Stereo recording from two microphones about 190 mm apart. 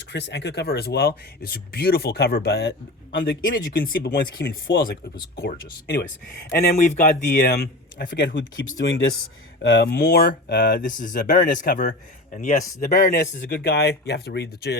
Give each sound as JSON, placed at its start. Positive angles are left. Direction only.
{"t": 0.1, "sound": "speech", "side_deg": 65}
{"t": 6.5, "sound": "a man's voice", "side_deg": 45}
{"t": 9.6, "sound": "a man's voice", "side_deg": 60}